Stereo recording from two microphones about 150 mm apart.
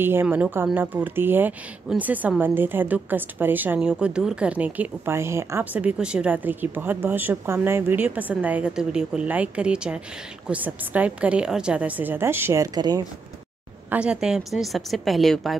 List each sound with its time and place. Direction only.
0.0 s a woman's voice: 15° right (ahead or behind)
12.7 s speech: 25° right (ahead or behind)
13.8 s a woman's voice: 5° right (ahead or behind)